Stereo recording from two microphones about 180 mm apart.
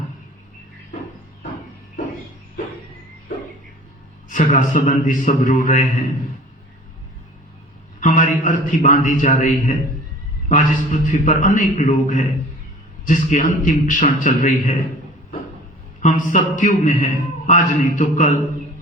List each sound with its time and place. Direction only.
4.3 s a man's voice: 45° left (ahead or behind)
8.0 s a man's voice: 45° left (ahead or behind)
16.0 s a man's voice: 45° left (ahead or behind)